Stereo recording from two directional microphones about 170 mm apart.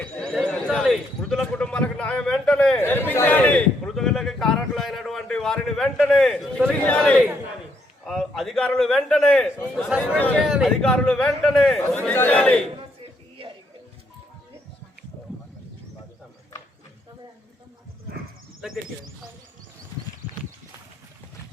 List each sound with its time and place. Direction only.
0.0 s a man's voice: centre (ahead or behind)
13.0 s a sound: 30° right (ahead or behind)
18.6 s speech: centre (ahead or behind)